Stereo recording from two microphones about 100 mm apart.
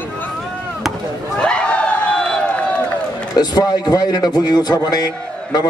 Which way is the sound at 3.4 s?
45° left (ahead or behind).